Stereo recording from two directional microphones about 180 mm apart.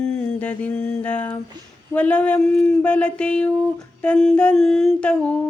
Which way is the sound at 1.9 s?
5° left (ahead or behind).